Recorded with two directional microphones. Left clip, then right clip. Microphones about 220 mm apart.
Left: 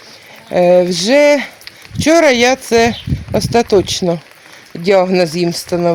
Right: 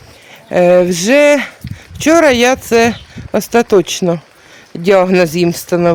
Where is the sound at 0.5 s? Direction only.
10° right (ahead or behind).